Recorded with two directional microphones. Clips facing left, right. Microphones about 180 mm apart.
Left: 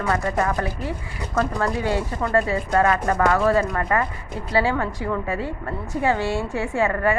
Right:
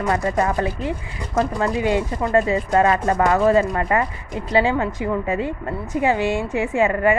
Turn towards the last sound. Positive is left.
turn(degrees=-20)  # may be behind; listen again after turning